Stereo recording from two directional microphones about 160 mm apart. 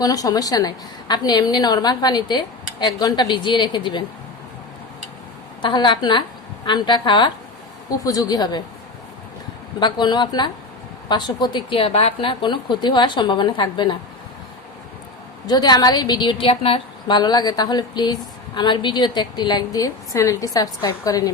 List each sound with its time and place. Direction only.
0.0 s speech: 25° left (ahead or behind)
5.6 s speech: 30° left (ahead or behind)
9.8 s speech: 25° left (ahead or behind)
15.4 s speech: 25° left (ahead or behind)